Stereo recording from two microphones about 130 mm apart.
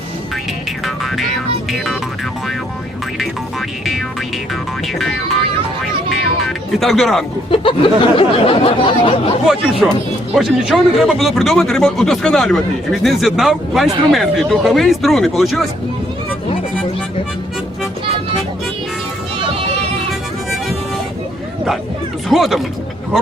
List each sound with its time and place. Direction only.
0.9 s speech: centre (ahead or behind)
4.9 s music: centre (ahead or behind)
6.7 s speech: centre (ahead or behind)
7.5 s a sound: 40° left (ahead or behind)
9.8 s speech: 5° right (ahead or behind)
22.3 s speech: centre (ahead or behind)